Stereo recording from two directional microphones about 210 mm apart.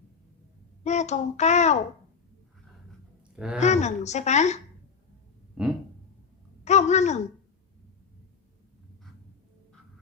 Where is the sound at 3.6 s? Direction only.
35° left (ahead or behind).